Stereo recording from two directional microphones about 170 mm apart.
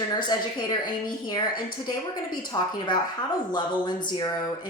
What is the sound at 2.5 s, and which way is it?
Speech, 25° left (ahead or behind).